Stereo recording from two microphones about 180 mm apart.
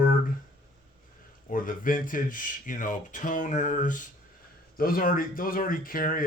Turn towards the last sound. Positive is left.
turn(degrees=50)  # may be behind; listen again after turning